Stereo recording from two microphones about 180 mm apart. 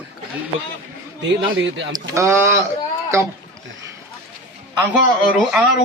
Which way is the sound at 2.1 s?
15° right (ahead or behind).